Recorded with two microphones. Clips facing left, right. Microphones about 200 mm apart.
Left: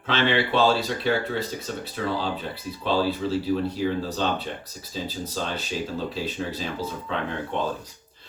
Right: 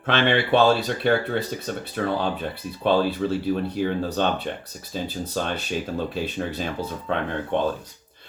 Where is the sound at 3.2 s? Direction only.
55° right (ahead or behind).